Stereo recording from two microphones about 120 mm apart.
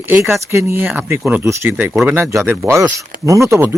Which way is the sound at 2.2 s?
20° right (ahead or behind).